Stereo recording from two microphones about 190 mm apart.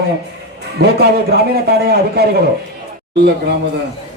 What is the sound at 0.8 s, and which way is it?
A man's voice, 60° right (ahead or behind).